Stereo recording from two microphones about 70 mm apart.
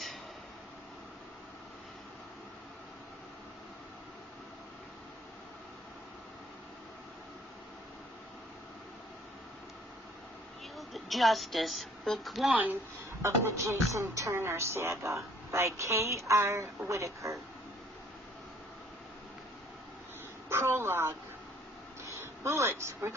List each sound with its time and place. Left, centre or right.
10.8 s speech: centre
13.2 s speech: right
20.5 s a sound: right
22.0 s speech: right